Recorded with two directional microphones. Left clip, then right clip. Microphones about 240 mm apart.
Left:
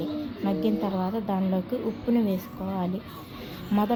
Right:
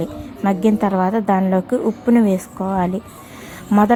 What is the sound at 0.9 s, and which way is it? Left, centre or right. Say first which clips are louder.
A woman's voice: right 12 dB; right.